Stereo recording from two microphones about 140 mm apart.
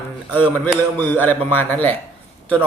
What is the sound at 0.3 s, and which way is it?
A man's voice, 15° left (ahead or behind).